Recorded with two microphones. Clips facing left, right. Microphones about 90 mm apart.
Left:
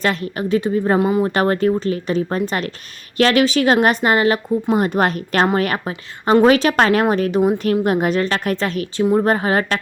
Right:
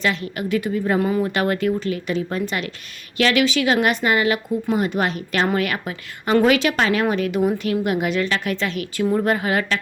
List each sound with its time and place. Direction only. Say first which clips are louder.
0.0 s a woman's voice: left 3 dB; 40° left (ahead or behind); by 1.3 s 25° left (ahead or behind)
1.3 s a woman's voice: left 4 dB; 35° left (ahead or behind)
9.0 s a woman's voice: left 4 dB; 30° left (ahead or behind)